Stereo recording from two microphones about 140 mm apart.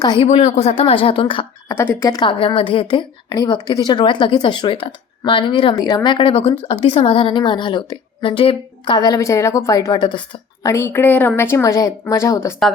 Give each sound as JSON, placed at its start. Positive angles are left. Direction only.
{"t": 0.2, "sound": "speech", "side_deg": 45}
{"t": 1.6, "sound": "speech", "side_deg": 15}
{"t": 2.0, "sound": "speech", "side_deg": 30}
{"t": 5.7, "sound": "speech", "side_deg": 25}
{"t": 10.7, "sound": "speech", "side_deg": 20}